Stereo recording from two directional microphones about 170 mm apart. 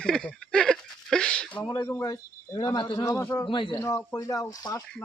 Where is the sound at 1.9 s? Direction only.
20° left (ahead or behind).